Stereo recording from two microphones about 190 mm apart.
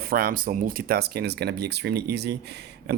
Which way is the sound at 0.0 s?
50° right (ahead or behind).